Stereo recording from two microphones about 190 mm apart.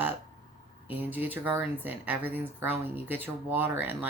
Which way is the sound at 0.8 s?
10° right (ahead or behind).